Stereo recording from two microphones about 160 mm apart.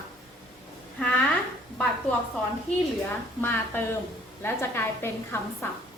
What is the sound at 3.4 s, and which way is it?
A woman's voice, 15° left (ahead or behind).